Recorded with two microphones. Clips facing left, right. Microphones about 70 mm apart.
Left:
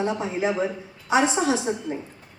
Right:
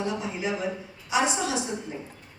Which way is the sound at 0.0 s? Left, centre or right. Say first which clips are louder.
Left 5 dB; left.